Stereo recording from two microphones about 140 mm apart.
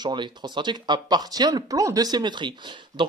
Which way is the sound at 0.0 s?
30° right (ahead or behind).